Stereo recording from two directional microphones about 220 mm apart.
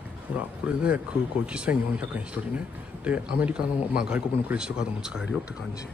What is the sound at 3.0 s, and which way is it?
Speech, 5° right (ahead or behind).